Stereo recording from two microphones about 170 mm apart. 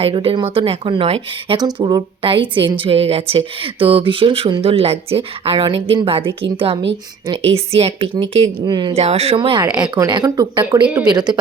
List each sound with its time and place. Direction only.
0.0 s a woman's voice: 30° right (ahead or behind)
1.5 s a woman's voice: 25° right (ahead or behind)
9.0 s a woman's voice: 40° right (ahead or behind)
10.8 s speech: 5° right (ahead or behind)
11.1 s speech: 25° right (ahead or behind)